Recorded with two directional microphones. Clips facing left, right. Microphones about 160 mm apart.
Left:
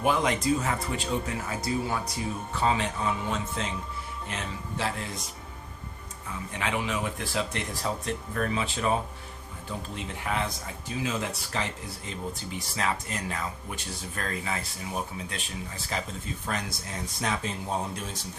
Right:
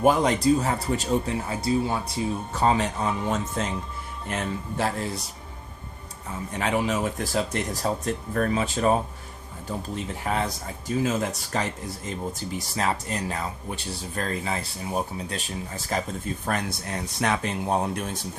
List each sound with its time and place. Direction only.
0.0 s speech: 40° right (ahead or behind)
2.5 s speech: 40° right (ahead or behind)
6.2 s speech: 40° right (ahead or behind)
16.5 s speech: 55° right (ahead or behind)